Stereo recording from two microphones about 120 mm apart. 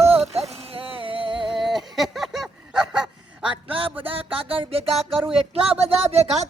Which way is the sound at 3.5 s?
50° right (ahead or behind).